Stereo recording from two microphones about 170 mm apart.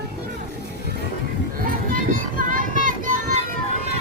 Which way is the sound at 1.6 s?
55° right (ahead or behind).